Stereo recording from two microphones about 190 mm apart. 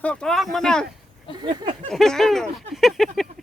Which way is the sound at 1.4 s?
30° right (ahead or behind).